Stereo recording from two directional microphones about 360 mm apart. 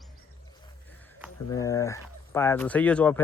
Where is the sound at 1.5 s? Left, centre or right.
Centre.